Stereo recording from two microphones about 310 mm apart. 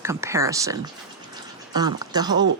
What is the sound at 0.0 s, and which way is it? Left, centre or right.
Speech, centre.